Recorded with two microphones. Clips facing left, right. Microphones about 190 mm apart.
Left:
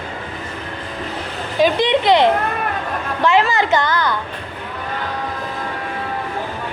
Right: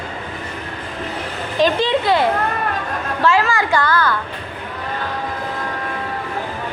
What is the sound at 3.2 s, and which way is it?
Speech, 20° left (ahead or behind).